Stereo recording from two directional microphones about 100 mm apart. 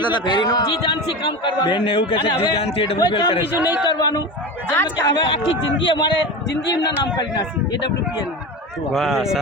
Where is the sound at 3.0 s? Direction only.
45° left (ahead or behind).